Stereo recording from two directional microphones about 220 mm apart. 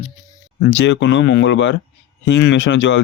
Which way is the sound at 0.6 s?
55° left (ahead or behind).